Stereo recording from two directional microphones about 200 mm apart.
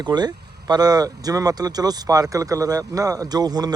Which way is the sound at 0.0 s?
20° right (ahead or behind).